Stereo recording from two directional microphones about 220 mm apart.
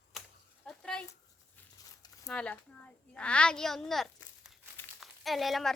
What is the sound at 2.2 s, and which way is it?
Speech, 5° left (ahead or behind).